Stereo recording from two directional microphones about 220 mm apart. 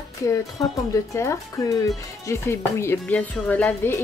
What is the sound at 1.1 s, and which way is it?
Speech, 10° left (ahead or behind).